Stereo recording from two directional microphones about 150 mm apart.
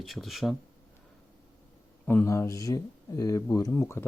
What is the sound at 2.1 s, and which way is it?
Speech, 15° left (ahead or behind).